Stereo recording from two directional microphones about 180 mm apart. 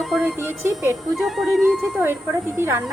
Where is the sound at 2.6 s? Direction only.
15° right (ahead or behind).